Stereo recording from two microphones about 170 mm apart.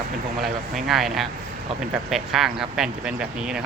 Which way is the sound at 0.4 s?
Centre (ahead or behind).